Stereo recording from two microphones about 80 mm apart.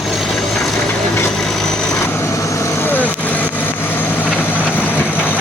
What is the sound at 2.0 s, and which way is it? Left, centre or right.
Vehicle, left.